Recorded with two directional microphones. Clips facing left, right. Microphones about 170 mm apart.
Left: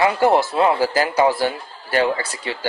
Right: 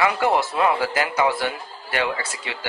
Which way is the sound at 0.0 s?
30° left (ahead or behind).